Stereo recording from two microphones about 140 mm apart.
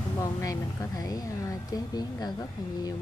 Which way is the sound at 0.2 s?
25° left (ahead or behind).